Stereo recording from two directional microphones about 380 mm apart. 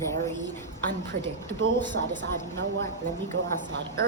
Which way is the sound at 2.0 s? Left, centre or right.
Right.